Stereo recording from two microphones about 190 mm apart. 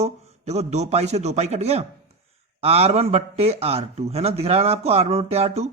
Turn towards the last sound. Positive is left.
turn(degrees=-35)  # may be behind; listen again after turning